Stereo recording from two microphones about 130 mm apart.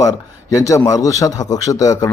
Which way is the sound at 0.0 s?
25° left (ahead or behind).